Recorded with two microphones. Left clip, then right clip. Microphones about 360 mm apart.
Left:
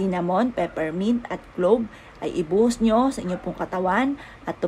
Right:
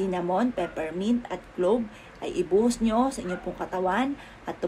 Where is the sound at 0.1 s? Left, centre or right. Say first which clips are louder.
Left 3 dB; left.